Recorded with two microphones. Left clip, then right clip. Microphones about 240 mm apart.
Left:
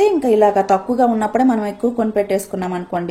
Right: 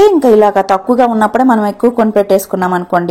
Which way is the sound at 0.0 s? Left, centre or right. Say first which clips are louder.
Right 6 dB; right.